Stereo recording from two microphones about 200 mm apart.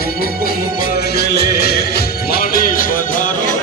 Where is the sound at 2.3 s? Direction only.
45° left (ahead or behind).